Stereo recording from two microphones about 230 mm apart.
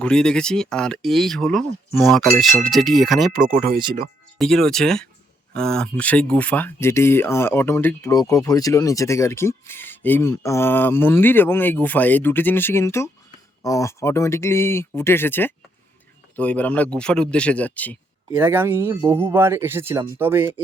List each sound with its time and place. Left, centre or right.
0.0 s speech: centre
4.4 s speech: centre
18.3 s speech: centre